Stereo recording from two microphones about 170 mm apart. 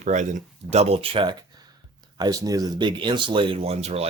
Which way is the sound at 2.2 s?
20° right (ahead or behind).